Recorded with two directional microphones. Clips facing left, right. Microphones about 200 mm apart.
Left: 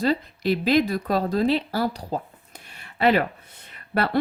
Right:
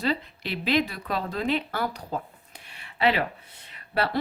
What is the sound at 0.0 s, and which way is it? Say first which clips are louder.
Speech: left 5 dB; 40° left (ahead or behind).